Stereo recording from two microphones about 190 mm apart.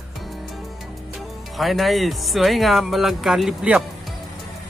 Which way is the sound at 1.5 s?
Centre (ahead or behind).